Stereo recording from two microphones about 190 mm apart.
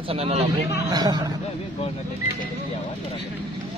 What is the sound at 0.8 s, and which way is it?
Speech, 20° right (ahead or behind).